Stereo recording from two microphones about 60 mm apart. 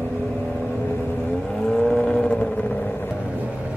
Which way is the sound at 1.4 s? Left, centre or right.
Centre.